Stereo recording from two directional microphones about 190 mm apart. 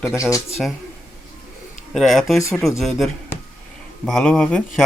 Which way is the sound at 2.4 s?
15° left (ahead or behind).